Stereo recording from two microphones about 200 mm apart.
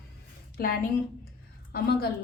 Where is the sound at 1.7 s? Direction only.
50° left (ahead or behind).